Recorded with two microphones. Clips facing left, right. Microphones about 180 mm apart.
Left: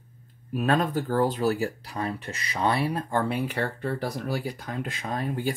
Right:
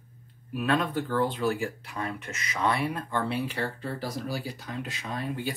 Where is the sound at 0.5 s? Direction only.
45° left (ahead or behind).